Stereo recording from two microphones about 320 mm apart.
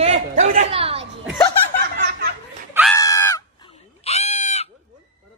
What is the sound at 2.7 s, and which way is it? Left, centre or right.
Screaming, centre.